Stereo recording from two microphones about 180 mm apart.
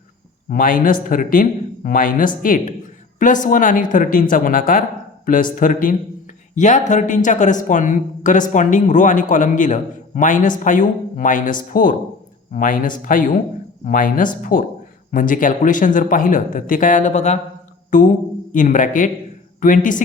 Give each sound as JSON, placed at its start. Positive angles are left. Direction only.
{"t": 0.5, "sound": "speech", "side_deg": 50}